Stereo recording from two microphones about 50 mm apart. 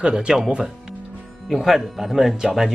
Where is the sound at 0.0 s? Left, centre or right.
Centre.